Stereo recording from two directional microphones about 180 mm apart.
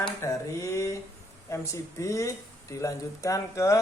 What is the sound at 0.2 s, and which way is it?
Speech, 15° left (ahead or behind).